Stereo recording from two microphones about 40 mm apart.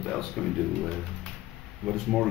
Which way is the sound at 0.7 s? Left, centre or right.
Left.